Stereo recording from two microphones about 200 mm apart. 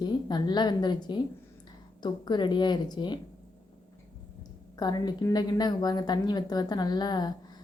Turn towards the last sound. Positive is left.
turn(degrees=20)  # may be behind; listen again after turning